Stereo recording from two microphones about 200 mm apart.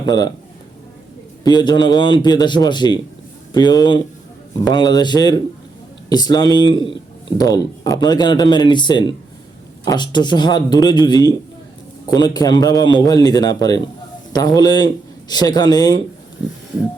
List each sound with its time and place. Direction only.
0.0 s speech: 20° left (ahead or behind)
1.5 s speech: 20° left (ahead or behind)